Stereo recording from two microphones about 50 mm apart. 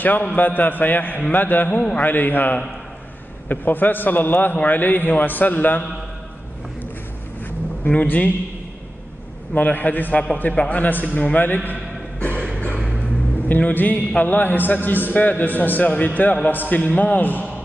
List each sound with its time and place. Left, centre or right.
0.0 s a man's voice: left
7.9 s a man's voice: left
9.5 s a man's voice: left
12.5 s music: left
13.6 s a man's voice: left